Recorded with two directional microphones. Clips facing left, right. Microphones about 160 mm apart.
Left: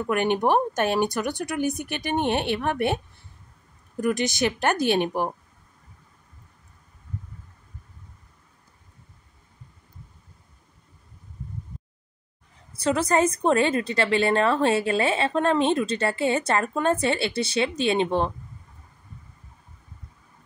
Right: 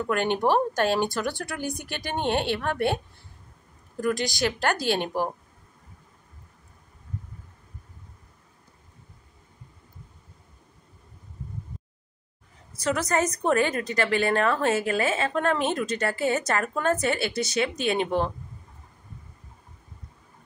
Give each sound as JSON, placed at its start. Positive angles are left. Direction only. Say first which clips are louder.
{"t": 0.1, "sound": "a woman's voice", "louder": "left 2 dB", "side_deg": 15}
{"t": 12.7, "sound": "a woman's voice", "louder": "left 3 dB", "side_deg": 30}